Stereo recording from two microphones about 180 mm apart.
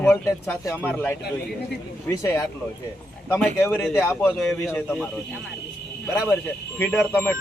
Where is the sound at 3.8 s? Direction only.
Centre (ahead or behind).